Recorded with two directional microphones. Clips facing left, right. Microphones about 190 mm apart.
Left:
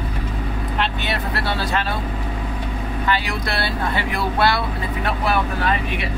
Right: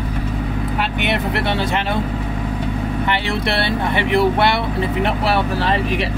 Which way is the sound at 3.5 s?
25° right (ahead or behind).